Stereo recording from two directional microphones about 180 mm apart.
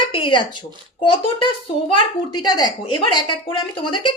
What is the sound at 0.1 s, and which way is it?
Speech, 30° left (ahead or behind).